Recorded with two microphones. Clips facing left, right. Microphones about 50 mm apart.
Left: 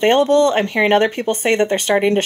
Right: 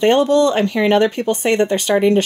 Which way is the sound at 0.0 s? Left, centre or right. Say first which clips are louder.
Even; left.